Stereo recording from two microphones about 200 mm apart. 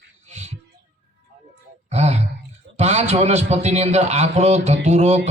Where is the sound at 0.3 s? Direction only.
35° right (ahead or behind).